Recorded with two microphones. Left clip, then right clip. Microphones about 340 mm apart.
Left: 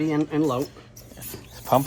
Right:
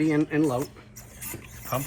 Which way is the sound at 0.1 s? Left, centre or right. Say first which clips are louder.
Left 1 dB; centre.